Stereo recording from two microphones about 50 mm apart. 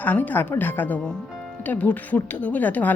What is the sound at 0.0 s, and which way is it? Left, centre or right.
A woman's voice, left.